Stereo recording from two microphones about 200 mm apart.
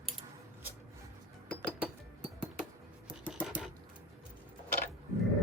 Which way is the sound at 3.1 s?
5° right (ahead or behind).